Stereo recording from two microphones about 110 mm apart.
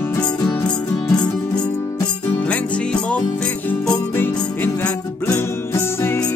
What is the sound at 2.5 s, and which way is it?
Music, 10° left (ahead or behind).